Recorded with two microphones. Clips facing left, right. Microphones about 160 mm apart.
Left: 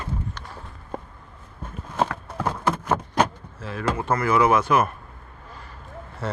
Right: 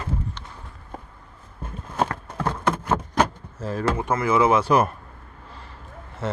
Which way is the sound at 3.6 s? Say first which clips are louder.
Right 5 dB; 40° right (ahead or behind).